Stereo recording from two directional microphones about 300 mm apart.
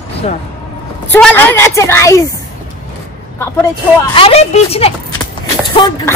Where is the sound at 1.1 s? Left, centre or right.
Centre.